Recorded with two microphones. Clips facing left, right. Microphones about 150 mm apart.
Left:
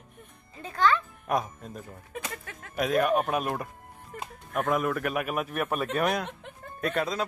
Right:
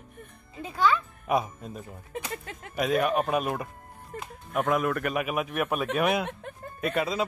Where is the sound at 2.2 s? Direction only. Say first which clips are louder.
Right 2 dB; 25° right (ahead or behind).